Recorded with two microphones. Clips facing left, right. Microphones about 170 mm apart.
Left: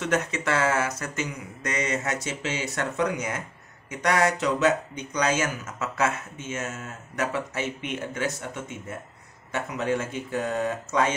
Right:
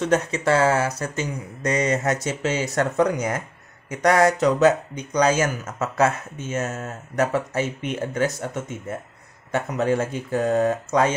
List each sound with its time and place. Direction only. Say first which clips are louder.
0.0 s speech: right 5 dB; 35° right (ahead or behind)